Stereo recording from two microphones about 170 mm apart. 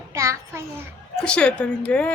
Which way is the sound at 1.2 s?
5° left (ahead or behind).